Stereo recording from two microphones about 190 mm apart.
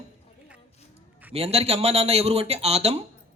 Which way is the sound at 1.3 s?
30° right (ahead or behind).